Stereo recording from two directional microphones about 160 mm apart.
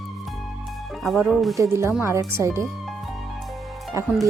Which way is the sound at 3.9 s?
20° right (ahead or behind).